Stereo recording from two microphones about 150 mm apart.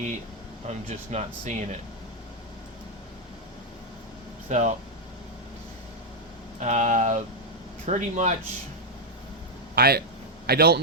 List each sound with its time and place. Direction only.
0.7 s speech: 50° right (ahead or behind)
4.4 s speech: 55° right (ahead or behind)
6.6 s speech: 50° right (ahead or behind)
9.7 s a man's voice: 90° right